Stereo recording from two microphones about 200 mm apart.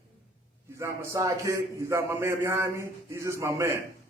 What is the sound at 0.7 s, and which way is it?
A man's voice, 15° right (ahead or behind).